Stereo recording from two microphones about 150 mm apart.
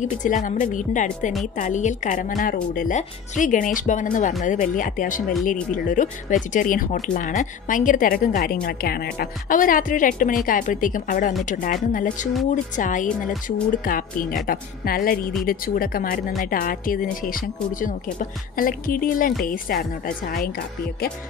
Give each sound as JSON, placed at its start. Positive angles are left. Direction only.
{"t": 0.0, "sound": "a woman's voice", "side_deg": 55}
{"t": 8.6, "sound": "a woman's voice", "side_deg": 90}